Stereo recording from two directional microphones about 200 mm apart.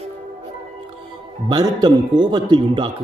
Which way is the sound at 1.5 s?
20° right (ahead or behind).